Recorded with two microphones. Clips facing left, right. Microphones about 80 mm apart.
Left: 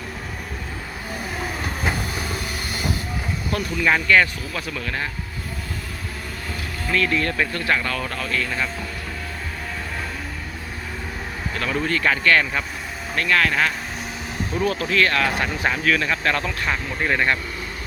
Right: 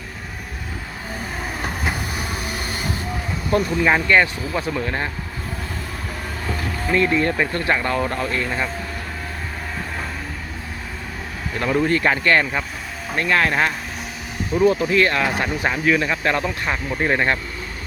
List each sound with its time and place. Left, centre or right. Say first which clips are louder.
1.8 s train: even; centre
3.5 s speech: right 4 dB; right
6.5 s speech: right 4 dB; right
11.5 s speech: right 5 dB; centre